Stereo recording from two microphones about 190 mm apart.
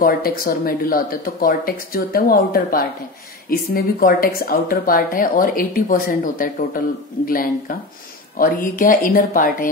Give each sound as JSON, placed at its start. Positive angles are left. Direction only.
{"t": 0.0, "sound": "speech", "side_deg": 50}